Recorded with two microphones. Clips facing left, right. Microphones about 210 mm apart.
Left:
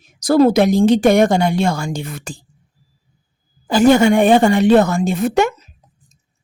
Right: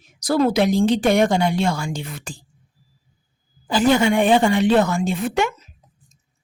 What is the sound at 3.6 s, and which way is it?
Speech, 45° left (ahead or behind).